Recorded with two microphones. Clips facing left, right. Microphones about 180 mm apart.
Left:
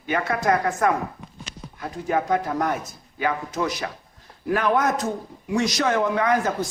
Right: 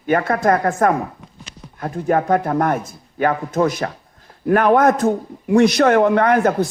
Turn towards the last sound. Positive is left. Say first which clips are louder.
# right 6 dB
turn(degrees=-60)  # may be behind; listen again after turning